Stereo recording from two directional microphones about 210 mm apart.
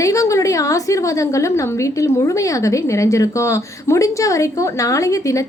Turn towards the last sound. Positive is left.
turn(degrees=15)  # may be behind; listen again after turning